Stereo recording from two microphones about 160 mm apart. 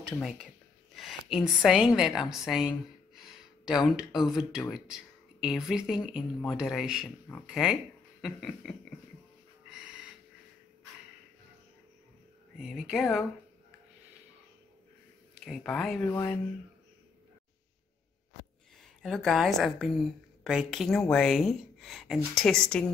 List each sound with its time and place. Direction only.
0.0 s a woman's voice: centre (ahead or behind)
9.7 s snort: 5° right (ahead or behind)
12.5 s a woman's voice: centre (ahead or behind)
15.4 s a woman's voice: 5° left (ahead or behind)
19.0 s a woman's voice: centre (ahead or behind)